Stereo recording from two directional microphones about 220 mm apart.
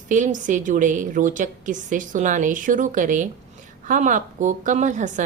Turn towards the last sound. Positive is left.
turn(degrees=-35)  # may be behind; listen again after turning